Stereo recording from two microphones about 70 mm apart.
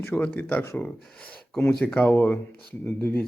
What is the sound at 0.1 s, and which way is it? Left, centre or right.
Speech, left.